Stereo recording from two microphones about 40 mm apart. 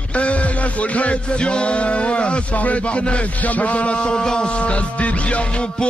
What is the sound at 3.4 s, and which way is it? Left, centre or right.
Speech, left.